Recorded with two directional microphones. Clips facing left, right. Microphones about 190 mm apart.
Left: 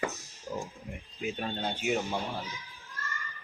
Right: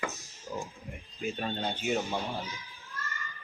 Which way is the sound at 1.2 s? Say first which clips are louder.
Right 1 dB; 5° left (ahead or behind).